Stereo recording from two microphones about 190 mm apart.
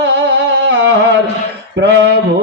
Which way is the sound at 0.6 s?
65° right (ahead or behind).